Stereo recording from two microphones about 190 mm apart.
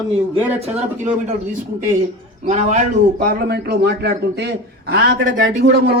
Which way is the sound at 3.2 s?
60° right (ahead or behind).